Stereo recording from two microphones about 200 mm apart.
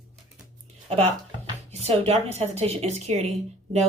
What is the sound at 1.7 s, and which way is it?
Speech, 30° right (ahead or behind).